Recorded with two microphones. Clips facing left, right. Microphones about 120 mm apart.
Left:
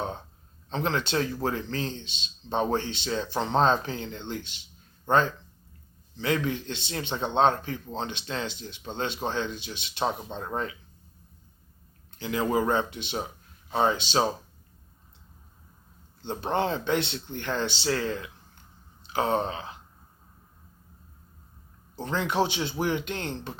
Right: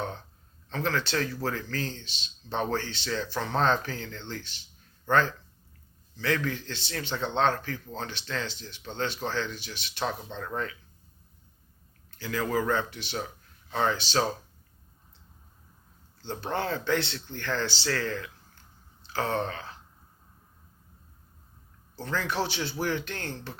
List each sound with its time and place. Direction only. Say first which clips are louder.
0.0 s a sound: left 2 dB; 20° left (ahead or behind)
0.7 s a man's voice: left 2 dB; 20° left (ahead or behind)
12.1 s speech: left 3 dB; 20° left (ahead or behind)
16.2 s a man's voice: left 4 dB; 20° left (ahead or behind)
21.9 s a man's voice: left 4 dB; 20° left (ahead or behind)